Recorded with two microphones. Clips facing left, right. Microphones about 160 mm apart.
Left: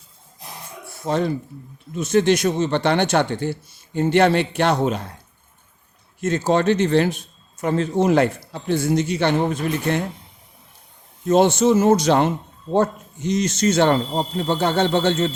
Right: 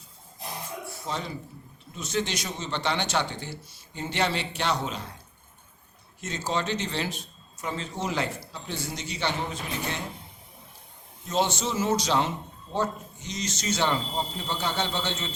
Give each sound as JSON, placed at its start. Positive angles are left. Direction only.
{"t": 1.0, "sound": "speech", "side_deg": 55}
{"t": 6.2, "sound": "speech", "side_deg": 55}
{"t": 11.3, "sound": "speech", "side_deg": 55}